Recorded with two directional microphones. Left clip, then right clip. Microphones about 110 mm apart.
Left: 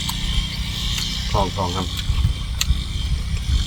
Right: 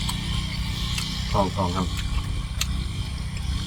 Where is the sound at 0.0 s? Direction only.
40° left (ahead or behind).